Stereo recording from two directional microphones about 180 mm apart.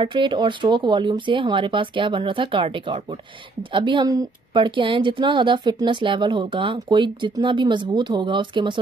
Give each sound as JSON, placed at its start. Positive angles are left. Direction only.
{"t": 0.0, "sound": "a woman's voice", "side_deg": -25}